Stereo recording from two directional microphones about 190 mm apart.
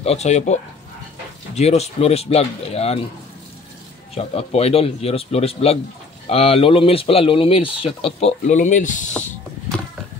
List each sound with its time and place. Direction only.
0.0 s speech: 35° left (ahead or behind)
4.1 s speech: 30° left (ahead or behind)